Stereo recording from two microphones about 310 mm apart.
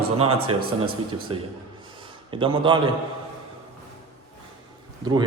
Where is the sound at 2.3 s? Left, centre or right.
Centre.